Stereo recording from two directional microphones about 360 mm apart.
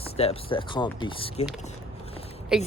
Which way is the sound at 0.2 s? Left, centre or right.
Centre.